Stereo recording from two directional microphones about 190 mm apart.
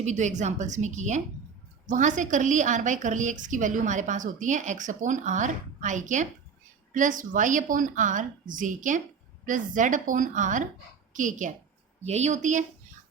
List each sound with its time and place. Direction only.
0.0 s a woman's voice: 40° right (ahead or behind)